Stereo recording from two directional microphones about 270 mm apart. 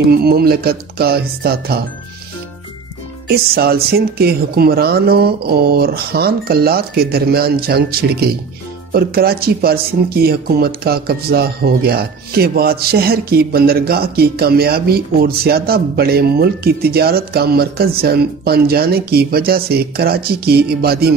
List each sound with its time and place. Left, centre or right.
0.1 s speech: right
3.3 s speech: right